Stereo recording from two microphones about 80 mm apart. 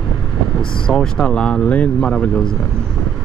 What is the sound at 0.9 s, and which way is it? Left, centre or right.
Speech, centre.